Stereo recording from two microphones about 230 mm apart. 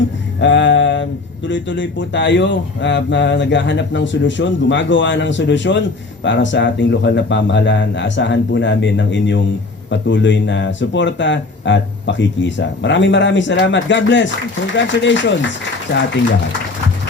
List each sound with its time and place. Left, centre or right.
0.3 s speech: left